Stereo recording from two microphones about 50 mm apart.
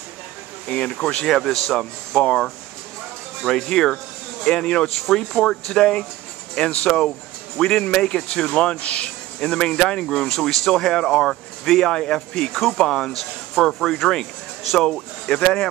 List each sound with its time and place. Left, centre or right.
0.7 s speech: left
2.2 s speech: left